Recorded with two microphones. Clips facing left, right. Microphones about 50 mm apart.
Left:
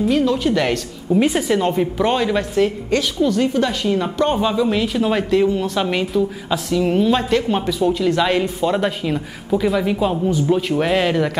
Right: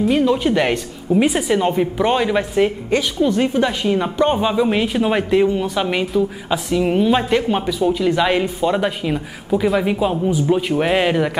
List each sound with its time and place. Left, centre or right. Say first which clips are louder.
0.1 s a woman's voice: right 1 dB; centre
1.1 s a woman's voice: even; centre